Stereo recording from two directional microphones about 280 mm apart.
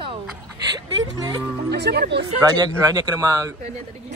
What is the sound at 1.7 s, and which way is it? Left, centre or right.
Speech, right.